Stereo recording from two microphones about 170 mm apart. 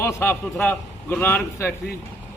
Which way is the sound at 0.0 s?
15° left (ahead or behind).